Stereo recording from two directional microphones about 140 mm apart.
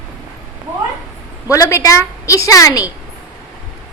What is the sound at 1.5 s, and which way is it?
A woman's voice, 20° left (ahead or behind).